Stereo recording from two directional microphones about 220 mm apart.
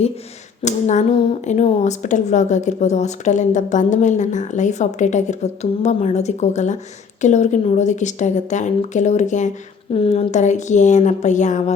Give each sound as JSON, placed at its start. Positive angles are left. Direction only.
{"t": 0.6, "sound": "a woman's voice", "side_deg": 30}